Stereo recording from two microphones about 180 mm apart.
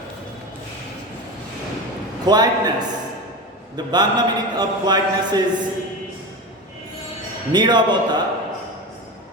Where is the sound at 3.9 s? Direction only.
25° right (ahead or behind).